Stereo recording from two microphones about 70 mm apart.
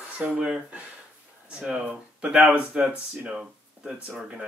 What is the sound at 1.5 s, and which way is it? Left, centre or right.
Speech, centre.